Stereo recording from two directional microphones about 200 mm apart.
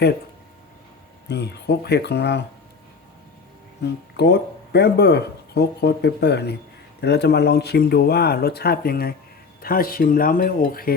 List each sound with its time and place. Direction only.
1.3 s speech: 55° left (ahead or behind)
4.2 s speech: 55° left (ahead or behind)